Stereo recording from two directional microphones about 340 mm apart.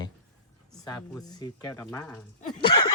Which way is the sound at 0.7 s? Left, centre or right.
Centre.